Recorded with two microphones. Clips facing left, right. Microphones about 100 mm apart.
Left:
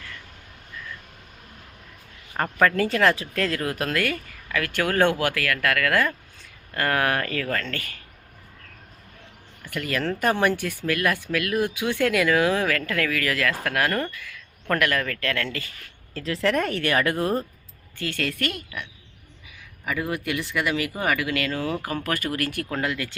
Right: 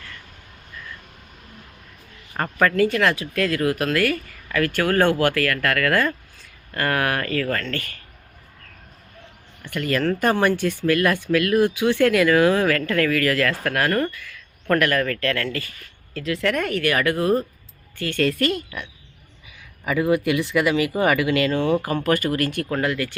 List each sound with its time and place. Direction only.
2.3 s speech: 5° left (ahead or behind)
2.7 s speech: 25° left (ahead or behind)
9.6 s speech: 5° left (ahead or behind)
14.8 s speech: 15° left (ahead or behind)
16.1 s speech: 30° left (ahead or behind)
18.0 s speech: 10° left (ahead or behind)
18.3 s speech: centre (ahead or behind)
19.8 s speech: 10° right (ahead or behind)
22.8 s speech: 15° left (ahead or behind)